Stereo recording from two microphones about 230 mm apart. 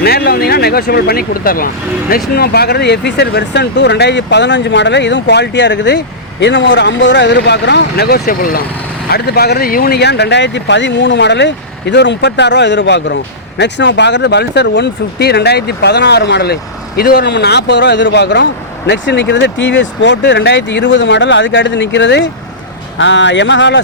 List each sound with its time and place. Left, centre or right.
0.0 s speech: left